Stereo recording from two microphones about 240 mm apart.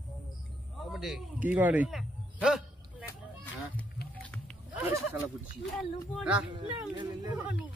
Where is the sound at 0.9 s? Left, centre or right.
Centre.